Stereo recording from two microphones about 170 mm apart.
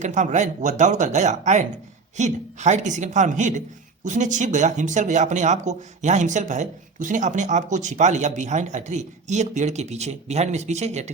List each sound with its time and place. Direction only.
0.0 s speech: 45° right (ahead or behind)